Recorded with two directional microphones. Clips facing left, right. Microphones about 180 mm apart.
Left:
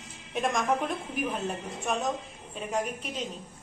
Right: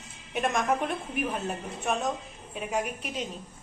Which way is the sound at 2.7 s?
10° right (ahead or behind).